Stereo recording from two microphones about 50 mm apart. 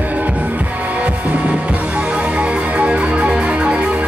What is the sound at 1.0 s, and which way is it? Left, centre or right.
Music, right.